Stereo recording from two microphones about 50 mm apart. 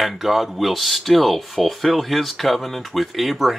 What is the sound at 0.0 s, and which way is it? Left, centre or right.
Speech, centre.